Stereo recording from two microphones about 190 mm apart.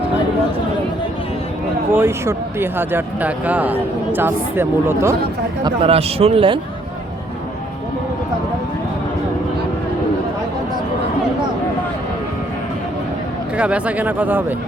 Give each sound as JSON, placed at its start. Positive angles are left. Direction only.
{"t": 1.9, "sound": "speech", "side_deg": -10}
{"t": 5.6, "sound": "a man's voice", "side_deg": -30}
{"t": 13.6, "sound": "speech", "side_deg": -5}